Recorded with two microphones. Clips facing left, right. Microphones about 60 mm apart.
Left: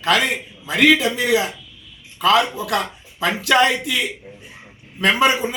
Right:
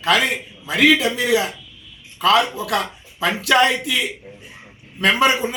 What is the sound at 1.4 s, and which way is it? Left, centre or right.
A man's voice, centre.